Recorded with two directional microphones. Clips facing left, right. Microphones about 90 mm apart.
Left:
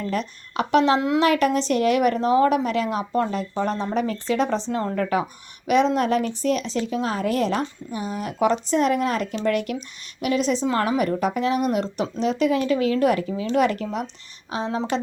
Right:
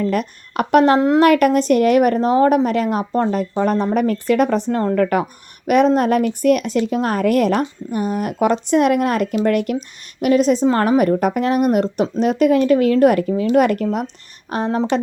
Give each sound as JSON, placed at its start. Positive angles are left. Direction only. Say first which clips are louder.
{"t": 0.0, "sound": "a woman's voice", "louder": "right 7 dB", "side_deg": -55}
{"t": 3.6, "sound": "a woman's voice", "louder": "right 6 dB", "side_deg": -60}